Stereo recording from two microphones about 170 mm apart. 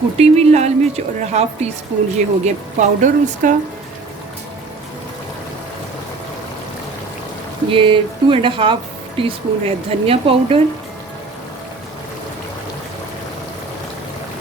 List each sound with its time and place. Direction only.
0.2 s speech: 40° right (ahead or behind)
7.7 s speech: 30° right (ahead or behind)